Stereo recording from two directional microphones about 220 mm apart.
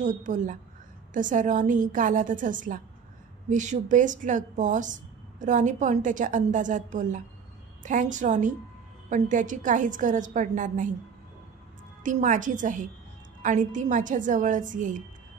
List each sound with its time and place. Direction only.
0.0 s a woman's voice: 35° right (ahead or behind)
12.0 s a woman's voice: 35° right (ahead or behind)